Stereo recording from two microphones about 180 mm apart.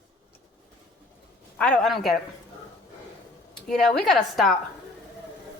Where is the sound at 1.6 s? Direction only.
5° left (ahead or behind).